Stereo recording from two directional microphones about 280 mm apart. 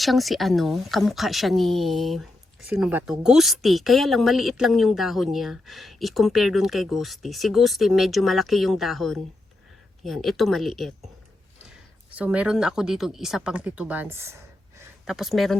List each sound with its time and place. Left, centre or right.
0.0 s speech: centre
12.1 s speech: centre
14.8 s a sound: centre